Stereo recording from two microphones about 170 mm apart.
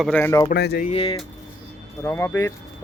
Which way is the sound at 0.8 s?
35° left (ahead or behind).